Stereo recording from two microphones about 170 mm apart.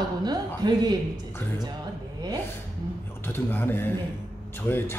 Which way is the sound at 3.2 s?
10° left (ahead or behind).